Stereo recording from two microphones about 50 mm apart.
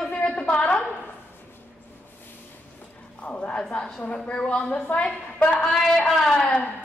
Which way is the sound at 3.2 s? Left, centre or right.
Left.